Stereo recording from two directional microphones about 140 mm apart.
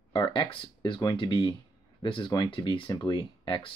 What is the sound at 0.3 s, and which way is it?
Speech, 35° left (ahead or behind).